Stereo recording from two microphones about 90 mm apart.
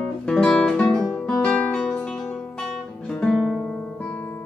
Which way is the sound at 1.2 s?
10° left (ahead or behind).